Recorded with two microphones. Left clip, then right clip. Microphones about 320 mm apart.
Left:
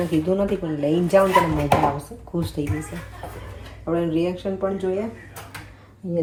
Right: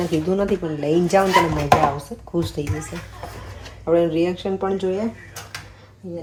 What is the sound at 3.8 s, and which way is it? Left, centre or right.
Speech, centre.